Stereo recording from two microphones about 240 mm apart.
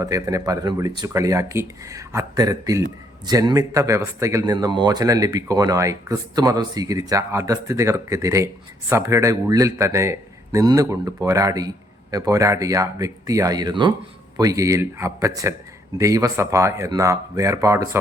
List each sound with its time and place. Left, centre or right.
0.0 s speech: centre